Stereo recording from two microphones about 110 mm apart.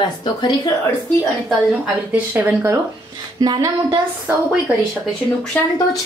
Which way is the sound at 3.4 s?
35° right (ahead or behind).